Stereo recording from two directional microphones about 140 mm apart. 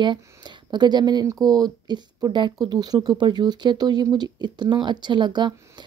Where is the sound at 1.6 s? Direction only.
30° right (ahead or behind).